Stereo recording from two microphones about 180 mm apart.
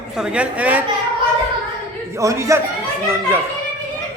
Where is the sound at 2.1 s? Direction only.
15° right (ahead or behind).